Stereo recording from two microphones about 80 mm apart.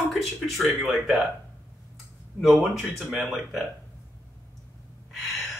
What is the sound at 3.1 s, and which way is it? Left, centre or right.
Speech, centre.